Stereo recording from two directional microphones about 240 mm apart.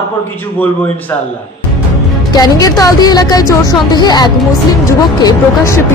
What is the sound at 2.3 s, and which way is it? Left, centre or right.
Speech, centre.